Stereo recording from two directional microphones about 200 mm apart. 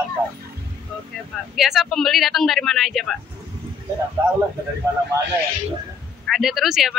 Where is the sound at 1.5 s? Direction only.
Centre (ahead or behind).